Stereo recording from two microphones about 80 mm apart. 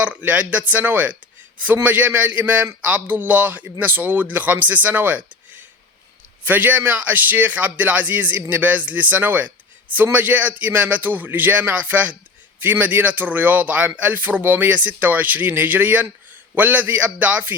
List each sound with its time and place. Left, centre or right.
0.0 s speech: right